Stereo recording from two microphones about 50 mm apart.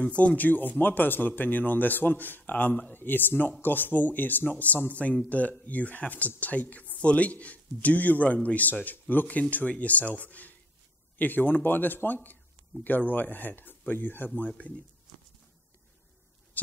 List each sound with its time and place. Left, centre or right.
0.0 s a man's voice: left